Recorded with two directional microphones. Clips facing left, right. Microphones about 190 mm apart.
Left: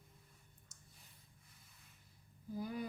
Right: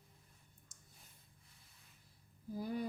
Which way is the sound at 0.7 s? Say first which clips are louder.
Left 1 dB; 50° right (ahead or behind).